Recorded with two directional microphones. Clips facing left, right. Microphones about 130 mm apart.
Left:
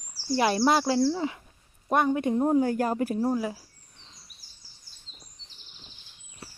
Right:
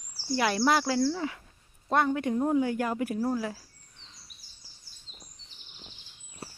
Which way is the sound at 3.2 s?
20° left (ahead or behind).